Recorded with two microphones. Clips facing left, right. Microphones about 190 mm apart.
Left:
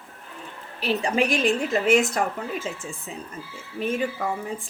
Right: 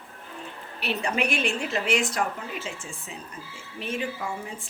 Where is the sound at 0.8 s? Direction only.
40° left (ahead or behind).